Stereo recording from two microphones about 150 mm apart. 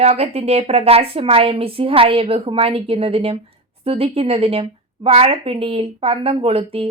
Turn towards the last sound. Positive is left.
turn(degrees=-40)  # may be behind; listen again after turning